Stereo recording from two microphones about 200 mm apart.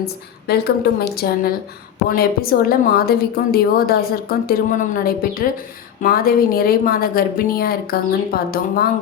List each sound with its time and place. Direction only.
0.4 s a woman's voice: 55° left (ahead or behind)